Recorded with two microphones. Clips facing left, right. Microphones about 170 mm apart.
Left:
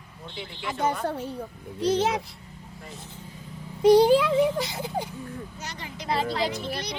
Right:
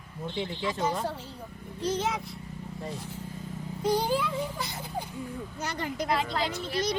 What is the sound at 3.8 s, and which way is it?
A child's voice, 80° left.